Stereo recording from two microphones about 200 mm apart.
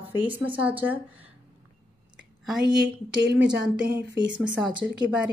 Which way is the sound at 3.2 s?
60° right (ahead or behind).